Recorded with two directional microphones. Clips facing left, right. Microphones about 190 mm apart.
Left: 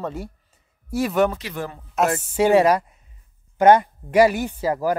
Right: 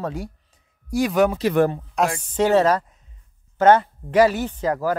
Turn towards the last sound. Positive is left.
turn(degrees=10)  # may be behind; listen again after turning